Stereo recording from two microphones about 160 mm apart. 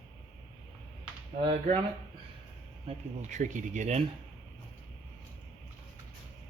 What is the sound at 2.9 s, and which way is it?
Speech, 50° right (ahead or behind).